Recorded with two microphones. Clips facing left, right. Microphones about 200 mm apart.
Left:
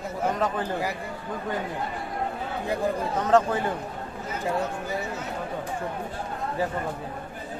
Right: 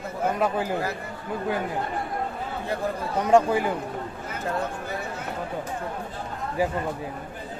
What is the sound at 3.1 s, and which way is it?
Speech, 10° right (ahead or behind).